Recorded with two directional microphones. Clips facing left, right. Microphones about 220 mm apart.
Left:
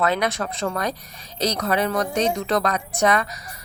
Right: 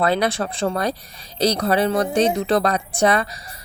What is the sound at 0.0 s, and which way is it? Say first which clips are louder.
A woman's voice: right 3 dB; 35° right (ahead or behind).